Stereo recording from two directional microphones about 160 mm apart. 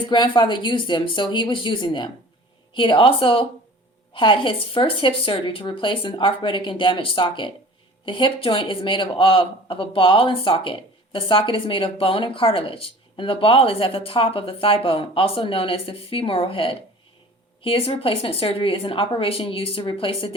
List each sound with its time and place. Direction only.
0.0 s speech: 30° left (ahead or behind)